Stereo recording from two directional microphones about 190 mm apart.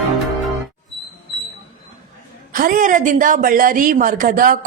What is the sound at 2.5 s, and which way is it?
A woman's voice, 45° right (ahead or behind).